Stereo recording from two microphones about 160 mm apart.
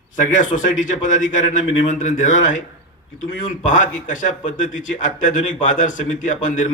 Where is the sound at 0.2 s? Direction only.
50° left (ahead or behind).